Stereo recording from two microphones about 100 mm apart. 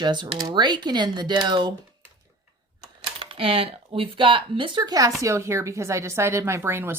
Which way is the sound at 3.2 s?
65° right (ahead or behind).